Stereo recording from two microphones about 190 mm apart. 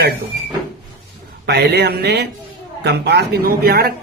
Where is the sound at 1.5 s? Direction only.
60° right (ahead or behind).